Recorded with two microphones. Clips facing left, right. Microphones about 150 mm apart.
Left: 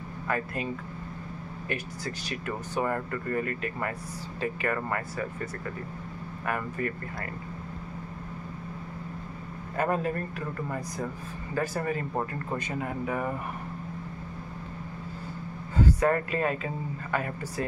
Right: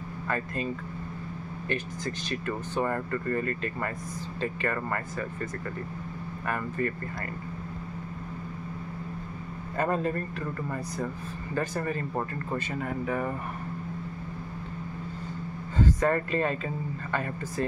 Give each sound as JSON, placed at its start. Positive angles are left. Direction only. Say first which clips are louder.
{"t": 1.7, "sound": "speech", "louder": "right 2 dB", "side_deg": 10}
{"t": 6.4, "sound": "speech", "louder": "right 1 dB", "side_deg": 10}
{"t": 9.8, "sound": "speech", "louder": "even", "side_deg": 10}
{"t": 11.5, "sound": "speech", "louder": "left 1 dB", "side_deg": 10}
{"t": 15.8, "sound": "speech", "louder": "left 1 dB", "side_deg": 10}